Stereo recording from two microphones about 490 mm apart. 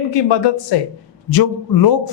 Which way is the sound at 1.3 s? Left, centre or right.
Left.